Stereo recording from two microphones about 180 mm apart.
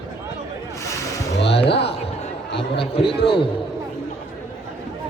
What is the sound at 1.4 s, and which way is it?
Music, 30° left (ahead or behind).